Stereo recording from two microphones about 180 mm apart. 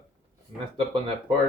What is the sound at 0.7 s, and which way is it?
Speech, 25° right (ahead or behind).